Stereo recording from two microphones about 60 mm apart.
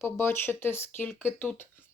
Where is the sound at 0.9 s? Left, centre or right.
Left.